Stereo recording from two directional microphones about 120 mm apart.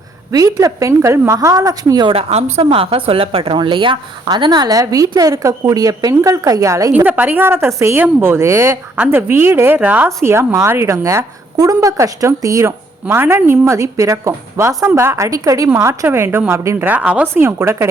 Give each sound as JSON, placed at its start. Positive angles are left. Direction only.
{"t": 0.3, "sound": "a woman's voice", "side_deg": -30}
{"t": 2.1, "sound": "speech", "side_deg": -55}
{"t": 6.9, "sound": "a woman's voice", "side_deg": -15}